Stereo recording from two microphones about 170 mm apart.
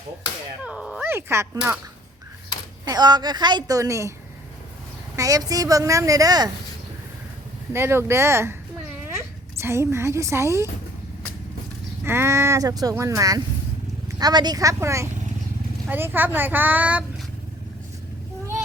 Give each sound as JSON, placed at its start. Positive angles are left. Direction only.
{"t": 0.6, "sound": "dog", "side_deg": -5}
{"t": 2.8, "sound": "a woman's voice", "side_deg": -25}
{"t": 5.1, "sound": "a woman's voice", "side_deg": -20}
{"t": 7.7, "sound": "speech", "side_deg": -15}
{"t": 12.0, "sound": "a woman's voice", "side_deg": -15}